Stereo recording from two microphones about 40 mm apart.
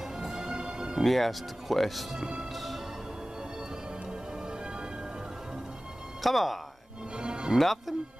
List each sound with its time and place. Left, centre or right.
0.2 s music: centre
1.0 s speech: centre
6.2 s speech: centre
7.2 s music: right
7.5 s speech: centre